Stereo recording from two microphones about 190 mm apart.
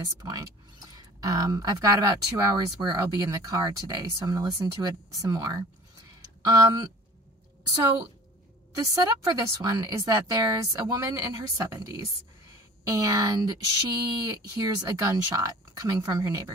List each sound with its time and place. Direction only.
0.2 s a woman's voice: 15° right (ahead or behind)
8.7 s a woman's voice: 15° right (ahead or behind)